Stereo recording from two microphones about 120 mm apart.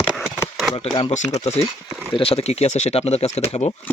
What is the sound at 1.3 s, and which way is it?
Speech, 65° left (ahead or behind).